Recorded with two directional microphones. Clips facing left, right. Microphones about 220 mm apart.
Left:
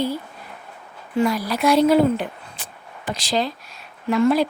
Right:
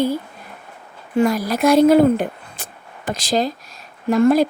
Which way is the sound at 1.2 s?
45° right (ahead or behind).